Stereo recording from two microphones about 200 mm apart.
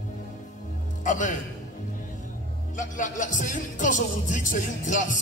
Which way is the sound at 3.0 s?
40° left (ahead or behind).